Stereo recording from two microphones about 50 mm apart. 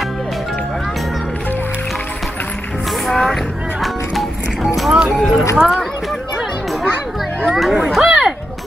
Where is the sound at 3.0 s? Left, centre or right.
Centre.